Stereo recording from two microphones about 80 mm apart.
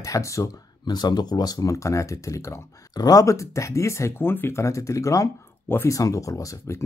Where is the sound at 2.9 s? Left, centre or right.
Left.